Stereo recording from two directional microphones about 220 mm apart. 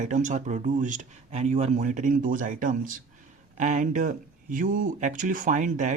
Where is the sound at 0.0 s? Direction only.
35° right (ahead or behind).